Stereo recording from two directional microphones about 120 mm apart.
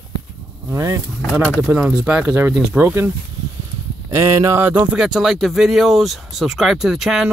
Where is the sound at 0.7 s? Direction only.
25° right (ahead or behind).